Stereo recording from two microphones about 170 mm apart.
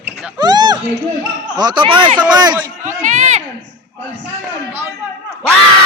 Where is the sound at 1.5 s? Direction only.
25° right (ahead or behind).